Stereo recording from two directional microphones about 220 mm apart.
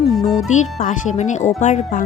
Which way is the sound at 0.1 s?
Centre (ahead or behind).